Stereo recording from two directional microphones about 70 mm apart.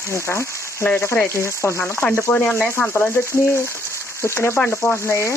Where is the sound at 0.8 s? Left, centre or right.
Left.